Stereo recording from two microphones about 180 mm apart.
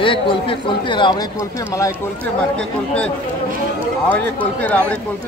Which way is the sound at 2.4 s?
5° left (ahead or behind).